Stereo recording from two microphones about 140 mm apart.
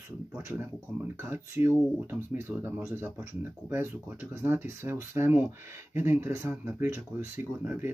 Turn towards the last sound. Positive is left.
turn(degrees=-15)  # may be behind; listen again after turning